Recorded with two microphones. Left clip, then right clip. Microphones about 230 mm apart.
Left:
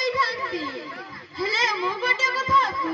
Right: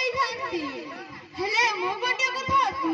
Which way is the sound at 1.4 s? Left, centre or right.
Right.